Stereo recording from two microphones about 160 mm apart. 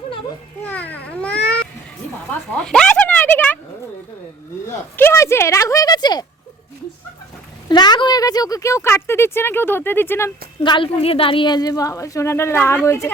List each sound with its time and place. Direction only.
0.6 s babbling: 10° left (ahead or behind)
2.6 s a sound: 5° left (ahead or behind)
4.9 s speech: 15° left (ahead or behind)
7.7 s speech: 30° left (ahead or behind)
10.6 s a woman's voice: 30° left (ahead or behind)